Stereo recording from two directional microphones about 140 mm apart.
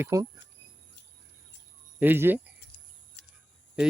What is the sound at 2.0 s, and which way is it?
Speech, 15° right (ahead or behind).